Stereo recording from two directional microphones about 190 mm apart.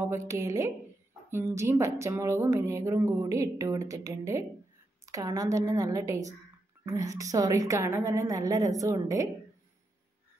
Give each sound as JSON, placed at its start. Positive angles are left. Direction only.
{"t": 0.0, "sound": "speech", "side_deg": -15}